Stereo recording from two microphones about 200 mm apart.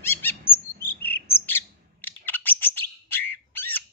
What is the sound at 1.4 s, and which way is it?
Bird, 10° left (ahead or behind).